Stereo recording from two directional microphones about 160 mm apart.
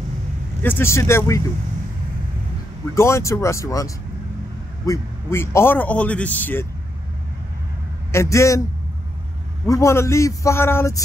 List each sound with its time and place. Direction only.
0.6 s a man's voice: 15° left (ahead or behind)
2.9 s a man's voice: 20° left (ahead or behind)
8.1 s a man's voice: 20° left (ahead or behind)
9.7 s a man's voice: 20° left (ahead or behind)